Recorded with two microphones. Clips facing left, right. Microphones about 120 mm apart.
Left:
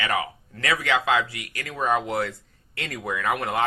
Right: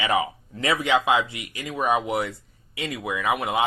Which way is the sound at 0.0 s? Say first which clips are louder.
Right 3 dB; 20° right (ahead or behind).